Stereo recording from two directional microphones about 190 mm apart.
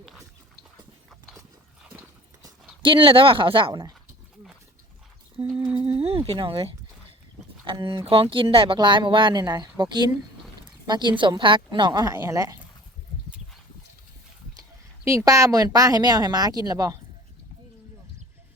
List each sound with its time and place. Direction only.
2.8 s speech: 25° right (ahead or behind)
5.6 s a sound: 25° right (ahead or behind)
7.6 s speech: 25° right (ahead or behind)
11.2 s speech: 25° right (ahead or behind)
15.0 s speech: 15° right (ahead or behind)